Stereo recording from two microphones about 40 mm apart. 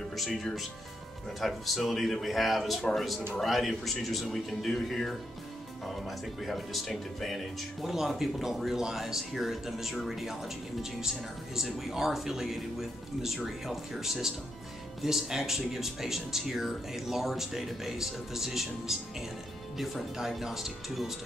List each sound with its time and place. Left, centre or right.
0.1 s speech: centre